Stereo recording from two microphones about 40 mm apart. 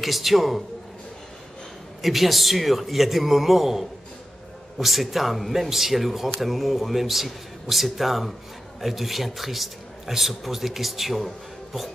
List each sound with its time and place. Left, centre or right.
0.0 s speech: centre
2.0 s speech: centre